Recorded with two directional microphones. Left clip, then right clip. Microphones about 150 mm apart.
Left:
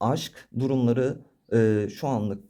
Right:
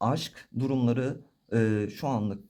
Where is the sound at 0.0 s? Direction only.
30° left (ahead or behind).